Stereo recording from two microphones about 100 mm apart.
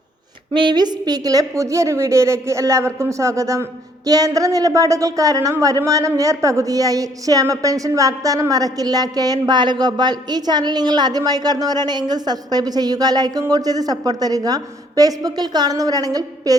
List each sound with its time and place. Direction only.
0.5 s a woman's voice: 50° right (ahead or behind)